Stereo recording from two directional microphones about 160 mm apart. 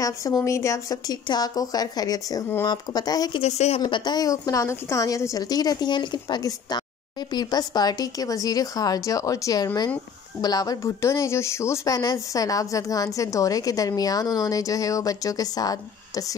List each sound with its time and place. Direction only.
0.0 s speech: 20° left (ahead or behind)
3.4 s speech: 45° left (ahead or behind)
3.8 s speech: 25° left (ahead or behind)